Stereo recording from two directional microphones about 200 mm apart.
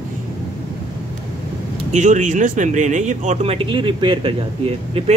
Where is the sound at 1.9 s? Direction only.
40° right (ahead or behind).